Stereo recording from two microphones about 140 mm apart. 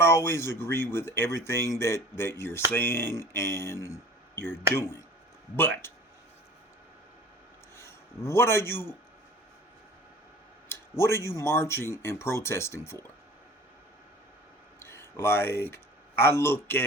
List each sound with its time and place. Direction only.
0.0 s speech: 20° left (ahead or behind)
7.8 s a man's voice: 20° left (ahead or behind)
10.7 s speech: 20° left (ahead or behind)
14.8 s speech: 20° left (ahead or behind)